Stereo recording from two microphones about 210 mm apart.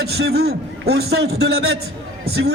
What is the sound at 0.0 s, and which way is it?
Speech, 50° right (ahead or behind).